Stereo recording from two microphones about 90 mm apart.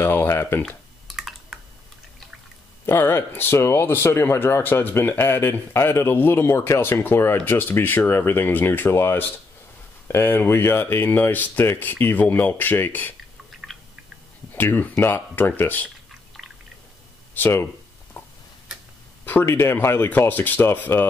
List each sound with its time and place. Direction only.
0.0 s speech: 30° left (ahead or behind)
0.6 s typing: 5° left (ahead or behind)
2.9 s speech: 25° left (ahead or behind)
14.5 s speech: 20° left (ahead or behind)
16.4 s pour: 5° right (ahead or behind)
17.3 s speech: 25° left (ahead or behind)
18.2 s a sound: 20° left (ahead or behind)
19.2 s speech: 20° left (ahead or behind)